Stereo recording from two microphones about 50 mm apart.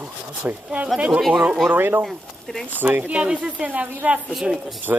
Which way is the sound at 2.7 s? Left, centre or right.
Right.